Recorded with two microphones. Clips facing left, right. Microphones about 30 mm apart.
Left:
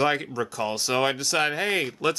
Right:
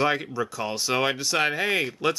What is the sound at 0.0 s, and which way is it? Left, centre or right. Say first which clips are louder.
Speech: even; centre.